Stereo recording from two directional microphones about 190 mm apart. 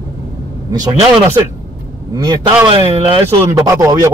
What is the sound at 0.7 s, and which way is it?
Speech, 20° right (ahead or behind).